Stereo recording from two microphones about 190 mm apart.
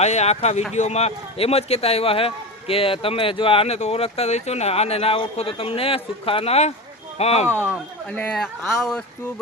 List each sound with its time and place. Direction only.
0.0 s a man's voice: 35° left (ahead or behind)
7.4 s speech: 10° right (ahead or behind)
8.1 s speech: 5° left (ahead or behind)